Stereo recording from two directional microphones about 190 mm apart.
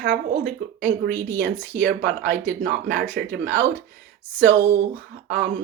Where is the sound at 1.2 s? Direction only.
60° right (ahead or behind).